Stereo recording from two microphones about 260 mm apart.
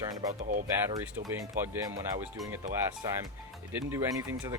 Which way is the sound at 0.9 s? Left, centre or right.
Centre.